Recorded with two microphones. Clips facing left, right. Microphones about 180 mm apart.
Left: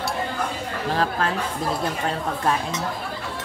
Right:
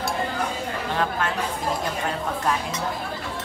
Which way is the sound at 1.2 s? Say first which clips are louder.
Left 2 dB; 35° left (ahead or behind).